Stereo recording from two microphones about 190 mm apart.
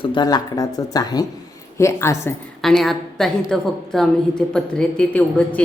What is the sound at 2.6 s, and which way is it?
A woman's voice, centre (ahead or behind).